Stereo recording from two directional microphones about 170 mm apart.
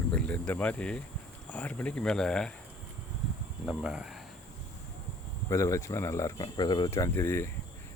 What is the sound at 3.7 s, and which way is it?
Speech, 5° right (ahead or behind).